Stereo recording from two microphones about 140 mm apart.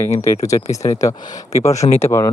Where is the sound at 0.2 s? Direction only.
25° left (ahead or behind).